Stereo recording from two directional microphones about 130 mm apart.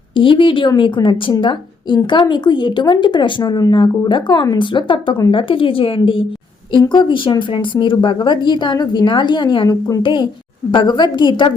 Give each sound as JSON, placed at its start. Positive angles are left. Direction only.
{"t": 0.2, "sound": "a woman's voice", "side_deg": 40}